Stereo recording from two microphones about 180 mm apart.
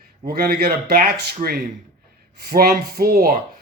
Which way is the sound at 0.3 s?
55° right (ahead or behind).